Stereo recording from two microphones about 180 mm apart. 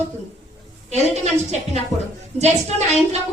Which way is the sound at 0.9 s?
40° right (ahead or behind).